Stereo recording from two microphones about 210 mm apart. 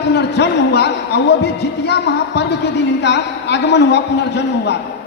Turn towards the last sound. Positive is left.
turn(degrees=55)  # may be behind; listen again after turning